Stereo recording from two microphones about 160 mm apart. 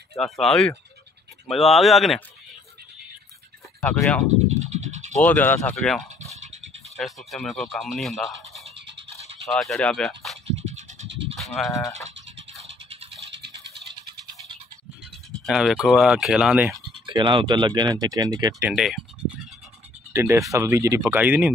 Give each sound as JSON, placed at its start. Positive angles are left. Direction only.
{"t": 0.2, "sound": "speech", "side_deg": 5}
{"t": 3.8, "sound": "speech", "side_deg": 10}
{"t": 4.6, "sound": "a sound", "side_deg": -45}
{"t": 5.2, "sound": "speech", "side_deg": 10}
{"t": 6.3, "sound": "dog", "side_deg": -45}
{"t": 7.0, "sound": "speech", "side_deg": 0}
{"t": 10.5, "sound": "a sound", "side_deg": -45}
{"t": 11.6, "sound": "speech", "side_deg": 0}
{"t": 13.3, "sound": "rattle", "side_deg": -90}
{"t": 15.4, "sound": "speech", "side_deg": 0}
{"t": 17.0, "sound": "speech", "side_deg": -30}
{"t": 18.6, "sound": "speech", "side_deg": -5}
{"t": 20.1, "sound": "speech", "side_deg": -15}